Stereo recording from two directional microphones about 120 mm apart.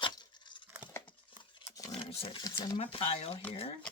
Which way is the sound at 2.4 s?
35° left (ahead or behind).